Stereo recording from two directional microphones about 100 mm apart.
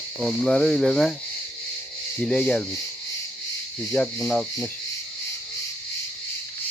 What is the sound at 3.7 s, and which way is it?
Speech, 10° left (ahead or behind).